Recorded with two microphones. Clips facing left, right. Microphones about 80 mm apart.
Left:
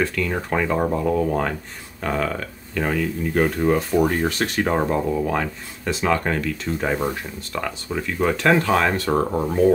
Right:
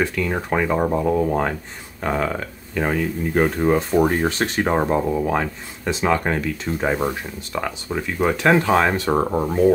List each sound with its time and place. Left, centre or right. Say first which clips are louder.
0.0 s speech: right 1 dB; centre